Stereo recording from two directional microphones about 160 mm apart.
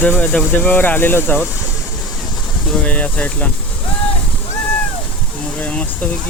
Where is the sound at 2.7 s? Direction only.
10° left (ahead or behind).